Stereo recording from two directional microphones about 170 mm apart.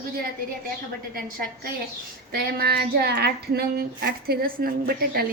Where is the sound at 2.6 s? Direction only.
70° right (ahead or behind).